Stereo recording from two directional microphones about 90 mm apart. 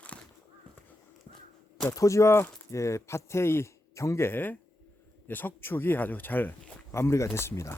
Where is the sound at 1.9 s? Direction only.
35° left (ahead or behind).